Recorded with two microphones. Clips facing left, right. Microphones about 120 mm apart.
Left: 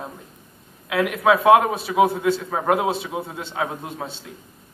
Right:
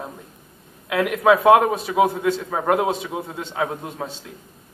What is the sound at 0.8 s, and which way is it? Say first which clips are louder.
A man's voice: right 1 dB; centre (ahead or behind).